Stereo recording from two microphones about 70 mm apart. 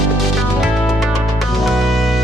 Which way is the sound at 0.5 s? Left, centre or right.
Centre.